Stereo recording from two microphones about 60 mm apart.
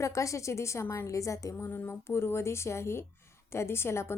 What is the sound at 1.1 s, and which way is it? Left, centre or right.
Speech, left.